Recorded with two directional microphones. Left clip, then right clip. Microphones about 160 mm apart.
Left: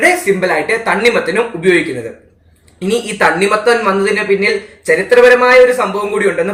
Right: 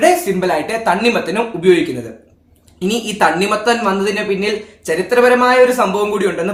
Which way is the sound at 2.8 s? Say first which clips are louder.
Left 2 dB; 25° right (ahead or behind).